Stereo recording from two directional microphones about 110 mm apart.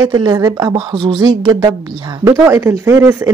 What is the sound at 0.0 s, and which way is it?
Speech, 35° right (ahead or behind).